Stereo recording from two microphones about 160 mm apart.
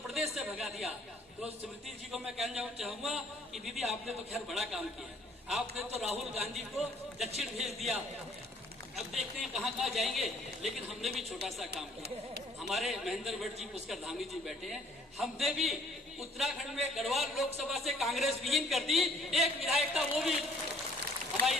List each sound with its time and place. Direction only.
0.1 s a sound: centre (ahead or behind)
2.1 s a man's voice: centre (ahead or behind)
9.0 s a man's voice: centre (ahead or behind)
11.7 s speech: 90° right
12.6 s a man's voice: centre (ahead or behind)